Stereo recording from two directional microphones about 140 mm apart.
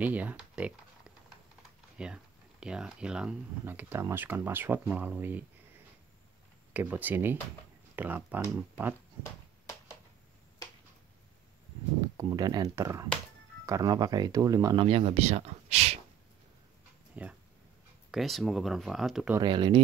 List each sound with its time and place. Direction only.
0.0 s speech: 10° right (ahead or behind)
6.7 s speech: 10° right (ahead or behind)
12.2 s speech: 25° right (ahead or behind)
14.8 s speech: 45° right (ahead or behind)
17.1 s speech: 10° right (ahead or behind)
19.4 s speech: 35° right (ahead or behind)